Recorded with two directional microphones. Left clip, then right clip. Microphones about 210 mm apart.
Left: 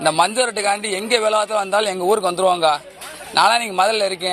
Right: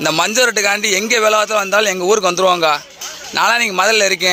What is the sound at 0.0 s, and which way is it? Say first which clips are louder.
A man's voice: right 3 dB; 35° right (ahead or behind).